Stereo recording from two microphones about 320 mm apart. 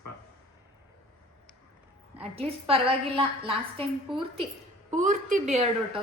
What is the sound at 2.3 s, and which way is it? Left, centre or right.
A woman's voice, centre.